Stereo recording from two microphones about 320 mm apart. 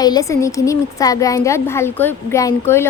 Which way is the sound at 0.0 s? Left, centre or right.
Centre.